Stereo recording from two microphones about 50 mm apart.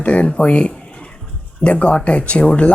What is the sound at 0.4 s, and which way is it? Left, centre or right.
Speech, left.